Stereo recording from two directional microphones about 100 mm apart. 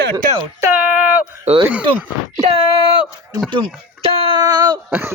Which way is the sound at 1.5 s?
90° right.